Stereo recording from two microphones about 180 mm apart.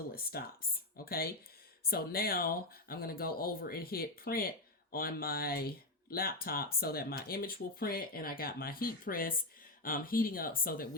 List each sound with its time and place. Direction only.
0.1 s speech: 55° left (ahead or behind)